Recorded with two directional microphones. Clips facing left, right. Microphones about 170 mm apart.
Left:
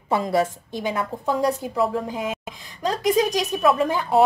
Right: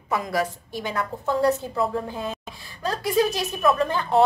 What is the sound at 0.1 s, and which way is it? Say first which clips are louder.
A woman's voice: left 4 dB; 25° left (ahead or behind).